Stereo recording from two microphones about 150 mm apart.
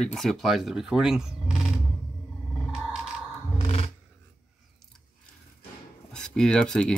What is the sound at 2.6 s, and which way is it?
Sonar, centre (ahead or behind).